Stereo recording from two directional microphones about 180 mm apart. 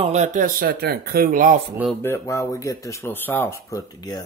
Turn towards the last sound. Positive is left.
turn(degrees=20)  # may be behind; listen again after turning